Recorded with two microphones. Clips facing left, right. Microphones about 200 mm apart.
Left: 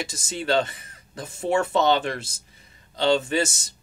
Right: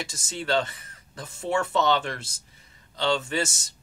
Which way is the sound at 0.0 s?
15° left (ahead or behind).